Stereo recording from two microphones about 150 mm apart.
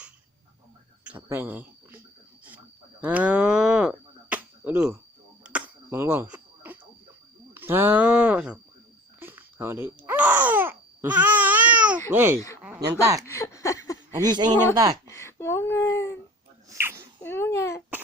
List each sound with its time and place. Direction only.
1.0 s speech: 15° right (ahead or behind)
3.0 s a sound: 10° right (ahead or behind)
7.5 s speech: 15° right (ahead or behind)
9.2 s babbling: 15° right (ahead or behind)
12.1 s speech: 15° right (ahead or behind)
13.2 s a sound: 20° left (ahead or behind)
14.2 s speech: 30° right (ahead or behind)
14.5 s speech: 15° left (ahead or behind)
16.6 s a sound: 15° right (ahead or behind)
17.2 s speech: 15° left (ahead or behind)